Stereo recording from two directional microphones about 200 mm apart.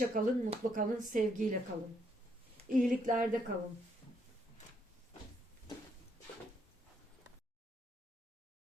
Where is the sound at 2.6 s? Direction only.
40° right (ahead or behind).